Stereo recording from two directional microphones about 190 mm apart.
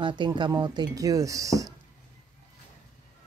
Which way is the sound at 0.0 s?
25° right (ahead or behind).